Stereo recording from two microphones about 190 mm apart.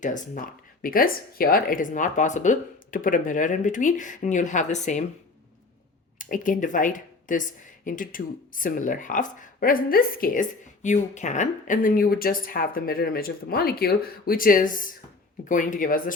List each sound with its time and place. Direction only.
0.0 s speech: 45° left (ahead or behind)
6.1 s speech: 45° left (ahead or behind)
10.8 s speech: 40° left (ahead or behind)